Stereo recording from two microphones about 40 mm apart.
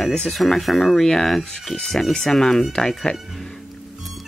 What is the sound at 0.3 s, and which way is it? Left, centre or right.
Speech, centre.